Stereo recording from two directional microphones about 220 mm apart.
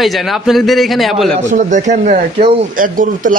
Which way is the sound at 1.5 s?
35° right (ahead or behind).